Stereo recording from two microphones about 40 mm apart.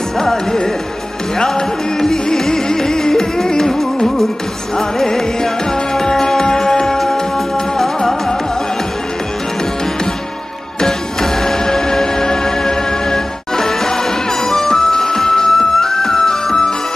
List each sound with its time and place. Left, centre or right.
0.2 s music: centre
10.8 s music: centre